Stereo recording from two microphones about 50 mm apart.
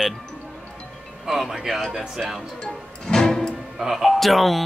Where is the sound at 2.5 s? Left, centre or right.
Centre.